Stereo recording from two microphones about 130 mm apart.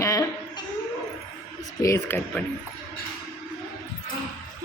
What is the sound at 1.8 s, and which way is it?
Speech, 20° left (ahead or behind).